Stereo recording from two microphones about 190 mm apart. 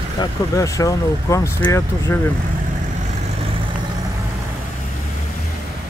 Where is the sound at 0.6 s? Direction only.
15° left (ahead or behind).